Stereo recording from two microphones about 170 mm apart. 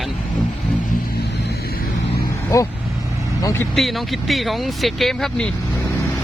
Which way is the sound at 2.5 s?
20° left (ahead or behind).